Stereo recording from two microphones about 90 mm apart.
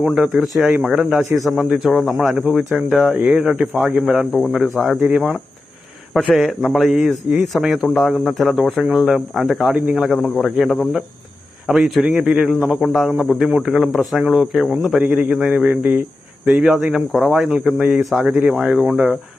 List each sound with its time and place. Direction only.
0.0 s speech: 5° right (ahead or behind)
9.7 s speech: 15° right (ahead or behind)
10.0 s speech: centre (ahead or behind)